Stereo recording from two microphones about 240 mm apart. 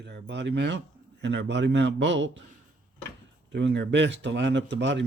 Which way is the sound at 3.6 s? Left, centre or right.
Right.